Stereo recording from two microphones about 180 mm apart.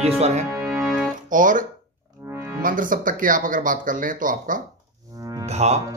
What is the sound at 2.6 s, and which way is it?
Speech, 50° right (ahead or behind).